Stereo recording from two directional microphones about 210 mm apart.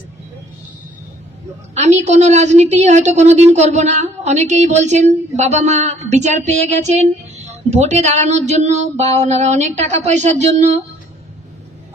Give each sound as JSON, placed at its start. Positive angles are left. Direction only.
{"t": 1.8, "sound": "a woman's voice", "side_deg": -35}